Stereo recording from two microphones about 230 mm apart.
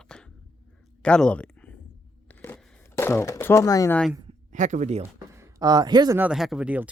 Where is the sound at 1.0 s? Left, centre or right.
Centre.